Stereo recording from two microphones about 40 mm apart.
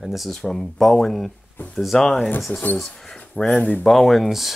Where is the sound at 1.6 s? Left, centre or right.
Left.